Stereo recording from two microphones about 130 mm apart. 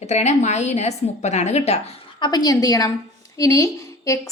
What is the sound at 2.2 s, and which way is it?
A woman's voice, 35° left (ahead or behind).